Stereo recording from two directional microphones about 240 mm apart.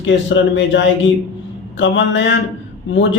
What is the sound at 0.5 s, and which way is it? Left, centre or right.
A man's voice, left.